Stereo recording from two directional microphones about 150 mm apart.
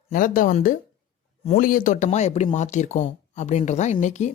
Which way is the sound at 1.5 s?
65° left (ahead or behind).